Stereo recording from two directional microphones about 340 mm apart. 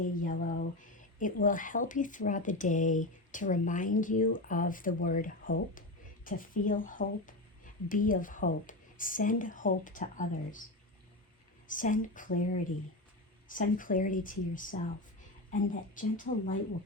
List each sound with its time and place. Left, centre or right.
0.2 s speech: left
11.7 s speech: left
13.5 s speech: left